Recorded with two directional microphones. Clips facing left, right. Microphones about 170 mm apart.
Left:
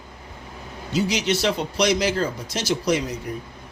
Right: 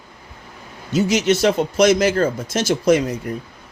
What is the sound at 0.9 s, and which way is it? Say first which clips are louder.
Speech: right 5 dB; 50° right (ahead or behind).